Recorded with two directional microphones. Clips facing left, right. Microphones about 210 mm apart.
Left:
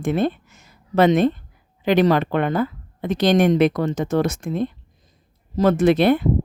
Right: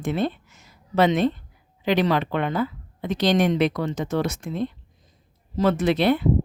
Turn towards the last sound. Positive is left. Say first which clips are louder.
# left 4 dB
turn(degrees=50)  # may be behind; listen again after turning